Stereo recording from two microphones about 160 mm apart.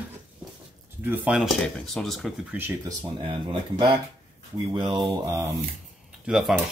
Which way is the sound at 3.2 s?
35° right (ahead or behind).